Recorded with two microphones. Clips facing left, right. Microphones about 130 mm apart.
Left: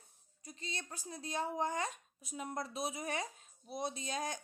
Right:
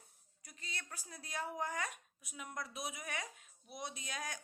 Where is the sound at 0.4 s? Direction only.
25° left (ahead or behind).